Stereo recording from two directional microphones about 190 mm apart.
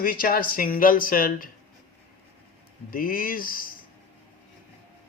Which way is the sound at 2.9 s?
50° left (ahead or behind).